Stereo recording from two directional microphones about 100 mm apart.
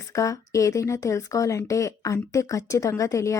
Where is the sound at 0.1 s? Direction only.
30° left (ahead or behind).